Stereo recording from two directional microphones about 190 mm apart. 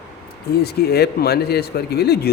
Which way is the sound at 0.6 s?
55° left (ahead or behind).